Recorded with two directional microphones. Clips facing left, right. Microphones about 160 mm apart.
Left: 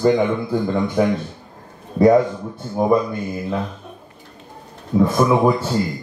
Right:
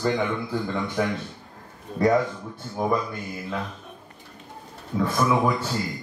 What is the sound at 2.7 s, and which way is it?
Speech, 25° left (ahead or behind).